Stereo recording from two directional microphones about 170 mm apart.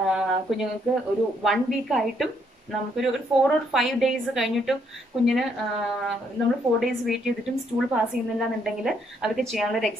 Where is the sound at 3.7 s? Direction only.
Centre (ahead or behind).